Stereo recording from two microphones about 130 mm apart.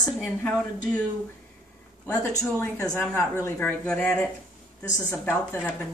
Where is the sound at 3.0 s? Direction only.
20° left (ahead or behind).